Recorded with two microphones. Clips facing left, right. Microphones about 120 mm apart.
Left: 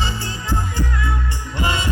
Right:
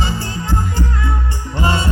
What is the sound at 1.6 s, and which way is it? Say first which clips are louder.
Music: right 4 dB; 40° right (ahead or behind).